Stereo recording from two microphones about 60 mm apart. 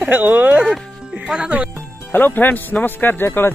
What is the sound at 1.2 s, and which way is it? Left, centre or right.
Speech, centre.